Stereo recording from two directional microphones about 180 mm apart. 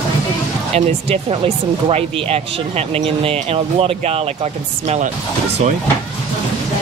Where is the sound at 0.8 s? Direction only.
35° right (ahead or behind).